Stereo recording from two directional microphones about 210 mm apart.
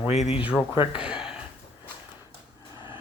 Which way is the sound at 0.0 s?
30° left (ahead or behind).